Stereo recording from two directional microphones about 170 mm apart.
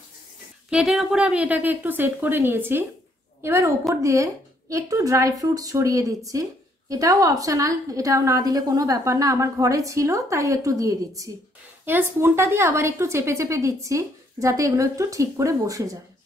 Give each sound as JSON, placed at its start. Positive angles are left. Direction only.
{"t": 0.7, "sound": "a woman's voice", "side_deg": -5}